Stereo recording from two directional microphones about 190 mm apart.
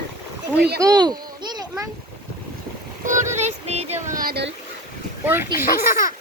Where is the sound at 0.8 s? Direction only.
20° right (ahead or behind).